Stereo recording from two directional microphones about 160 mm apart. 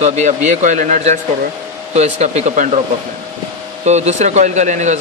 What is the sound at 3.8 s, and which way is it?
Speech, 45° right (ahead or behind).